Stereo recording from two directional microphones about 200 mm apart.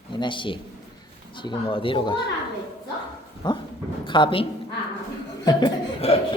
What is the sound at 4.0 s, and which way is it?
Speech, 25° left (ahead or behind).